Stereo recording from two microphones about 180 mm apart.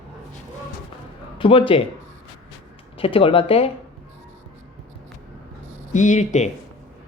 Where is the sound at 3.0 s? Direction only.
30° left (ahead or behind).